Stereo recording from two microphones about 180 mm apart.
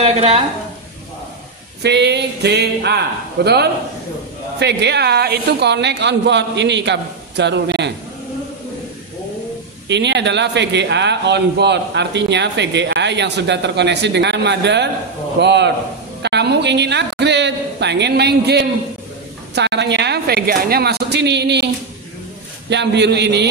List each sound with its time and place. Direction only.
0.0 s speech: 35° right (ahead or behind)
1.8 s a man's voice: 70° right (ahead or behind)
9.8 s a man's voice: 75° right (ahead or behind)
22.7 s a man's voice: 70° right (ahead or behind)